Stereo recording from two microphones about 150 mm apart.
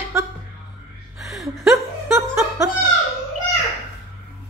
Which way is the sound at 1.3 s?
Centre (ahead or behind).